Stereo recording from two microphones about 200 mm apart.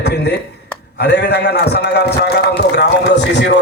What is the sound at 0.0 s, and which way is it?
A man's voice, 55° left (ahead or behind).